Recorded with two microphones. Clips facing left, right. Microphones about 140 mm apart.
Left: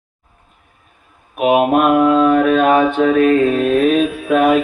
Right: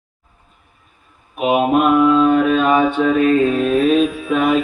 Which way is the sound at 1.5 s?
55° left (ahead or behind).